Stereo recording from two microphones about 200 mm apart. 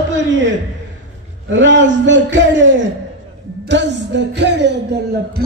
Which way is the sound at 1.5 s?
65° right (ahead or behind).